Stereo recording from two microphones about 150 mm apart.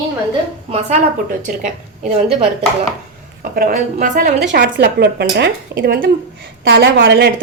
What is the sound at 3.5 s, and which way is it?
A woman's voice, 70° right (ahead or behind).